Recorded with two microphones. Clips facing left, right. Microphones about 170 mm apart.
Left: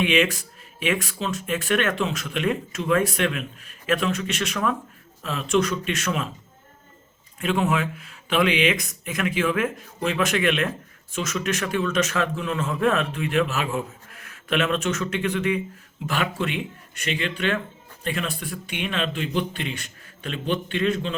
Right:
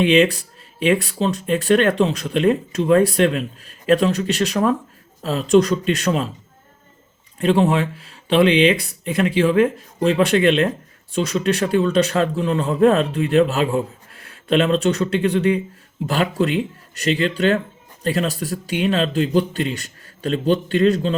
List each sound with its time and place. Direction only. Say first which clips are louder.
0.0 s speech: right 6 dB; 35° right (ahead or behind)
7.3 s speech: right 6 dB; 35° right (ahead or behind)